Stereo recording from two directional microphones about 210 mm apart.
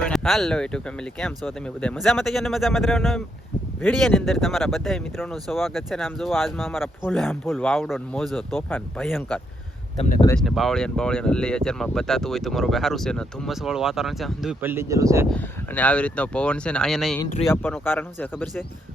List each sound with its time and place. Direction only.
0.0 s speech: centre (ahead or behind)
10.0 s speech: 30° left (ahead or behind)
10.4 s speech: centre (ahead or behind)
15.3 s speech: 5° left (ahead or behind)